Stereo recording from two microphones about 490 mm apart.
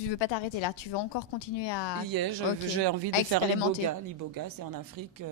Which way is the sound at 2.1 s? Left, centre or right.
Right.